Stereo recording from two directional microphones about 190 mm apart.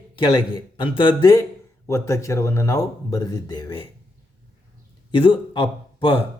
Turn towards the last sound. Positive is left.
turn(degrees=25)  # may be behind; listen again after turning